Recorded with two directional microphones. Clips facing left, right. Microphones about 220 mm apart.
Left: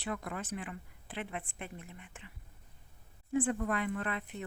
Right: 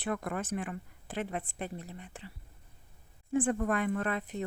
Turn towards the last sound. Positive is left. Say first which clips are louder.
# right 5 dB
turn(degrees=-40)  # may be behind; listen again after turning